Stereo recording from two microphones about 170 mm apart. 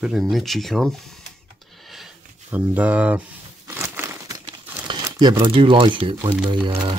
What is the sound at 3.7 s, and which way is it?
Crumpling, 15° right (ahead or behind).